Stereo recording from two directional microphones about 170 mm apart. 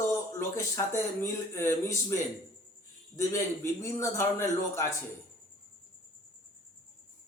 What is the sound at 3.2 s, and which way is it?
A man's voice, 15° left (ahead or behind).